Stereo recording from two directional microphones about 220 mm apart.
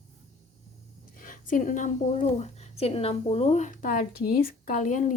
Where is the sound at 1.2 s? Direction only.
35° left (ahead or behind).